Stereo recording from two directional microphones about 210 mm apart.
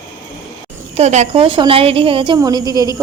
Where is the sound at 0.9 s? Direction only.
35° right (ahead or behind); by 3.0 s 15° right (ahead or behind).